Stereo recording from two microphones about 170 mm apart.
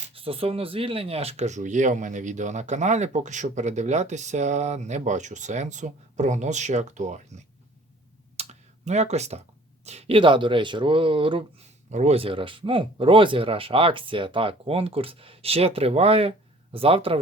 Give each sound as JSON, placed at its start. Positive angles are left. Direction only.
{"t": 0.1, "sound": "speech", "side_deg": -35}
{"t": 8.4, "sound": "a sound", "side_deg": -40}
{"t": 9.8, "sound": "speech", "side_deg": -40}
{"t": 11.9, "sound": "speech", "side_deg": -40}